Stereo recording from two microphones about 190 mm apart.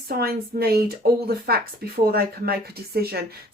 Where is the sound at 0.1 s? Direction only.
55° right (ahead or behind).